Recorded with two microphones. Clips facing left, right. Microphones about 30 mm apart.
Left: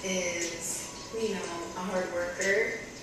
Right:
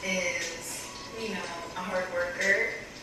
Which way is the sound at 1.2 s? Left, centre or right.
Right.